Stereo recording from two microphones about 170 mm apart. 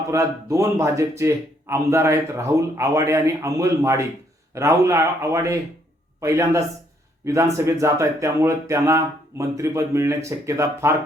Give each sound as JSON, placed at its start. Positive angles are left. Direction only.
{"t": 0.1, "sound": "speech", "side_deg": -15}